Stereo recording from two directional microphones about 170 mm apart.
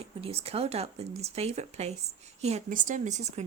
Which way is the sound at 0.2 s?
35° right (ahead or behind).